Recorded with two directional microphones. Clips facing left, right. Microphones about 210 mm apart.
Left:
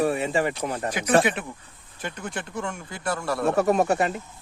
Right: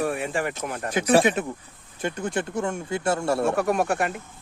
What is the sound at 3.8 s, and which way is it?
Speech, centre (ahead or behind).